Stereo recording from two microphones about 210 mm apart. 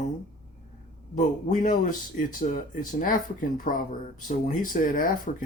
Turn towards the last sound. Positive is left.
turn(degrees=40)  # may be behind; listen again after turning